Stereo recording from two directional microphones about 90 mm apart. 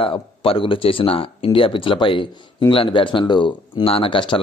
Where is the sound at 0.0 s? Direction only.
90° left.